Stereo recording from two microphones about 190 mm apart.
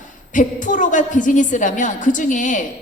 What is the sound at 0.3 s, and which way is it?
A woman's voice, 40° left (ahead or behind).